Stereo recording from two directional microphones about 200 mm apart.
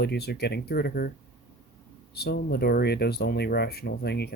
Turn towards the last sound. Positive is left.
turn(degrees=55)  # may be behind; listen again after turning